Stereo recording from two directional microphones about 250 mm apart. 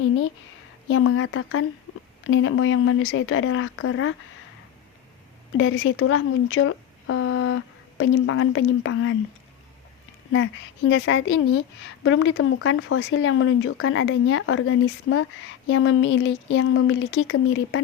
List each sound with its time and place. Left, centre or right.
0.9 s speech: left
5.5 s speech: left
10.3 s speech: left